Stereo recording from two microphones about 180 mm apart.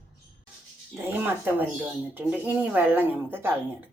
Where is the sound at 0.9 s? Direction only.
10° right (ahead or behind).